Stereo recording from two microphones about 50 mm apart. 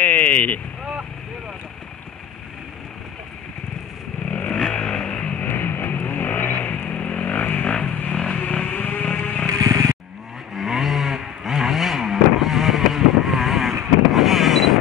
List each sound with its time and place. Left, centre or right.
0.0 s speech: left
4.3 s a sound: left
4.6 s vehicle: centre
5.4 s vehicle: left
8.1 s vehicle: centre
8.6 s music: left
10.5 s vehicle: centre